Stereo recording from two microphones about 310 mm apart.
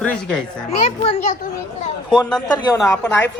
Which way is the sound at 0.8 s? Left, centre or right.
Left.